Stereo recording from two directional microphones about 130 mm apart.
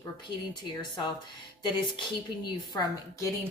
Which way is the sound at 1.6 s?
35° left (ahead or behind).